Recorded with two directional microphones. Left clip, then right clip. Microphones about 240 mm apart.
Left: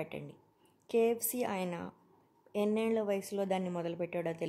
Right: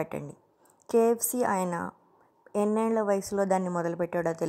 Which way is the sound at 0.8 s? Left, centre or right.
Right.